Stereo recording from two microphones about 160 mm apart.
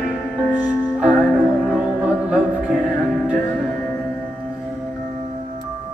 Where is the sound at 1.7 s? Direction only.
5° right (ahead or behind).